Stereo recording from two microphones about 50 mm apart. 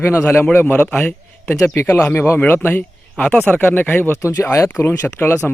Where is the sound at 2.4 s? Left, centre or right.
Left.